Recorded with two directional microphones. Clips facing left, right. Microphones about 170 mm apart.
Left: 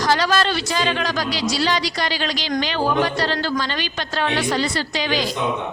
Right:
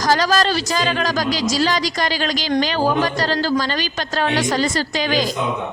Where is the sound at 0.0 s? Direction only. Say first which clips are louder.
Right 2 dB; 40° right (ahead or behind).